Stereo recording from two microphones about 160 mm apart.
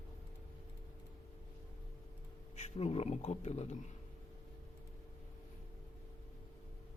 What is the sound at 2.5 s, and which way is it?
Speech, 40° left (ahead or behind).